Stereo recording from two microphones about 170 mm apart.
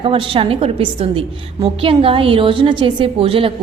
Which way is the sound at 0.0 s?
30° right (ahead or behind).